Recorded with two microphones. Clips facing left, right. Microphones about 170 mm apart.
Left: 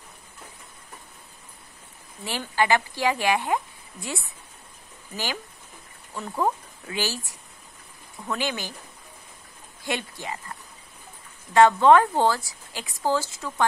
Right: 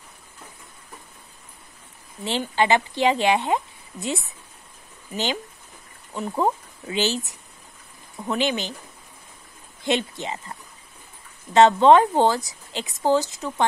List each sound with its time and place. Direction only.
2.2 s a woman's voice: 25° right (ahead or behind)
9.8 s a woman's voice: 20° right (ahead or behind)
11.5 s a woman's voice: 20° right (ahead or behind)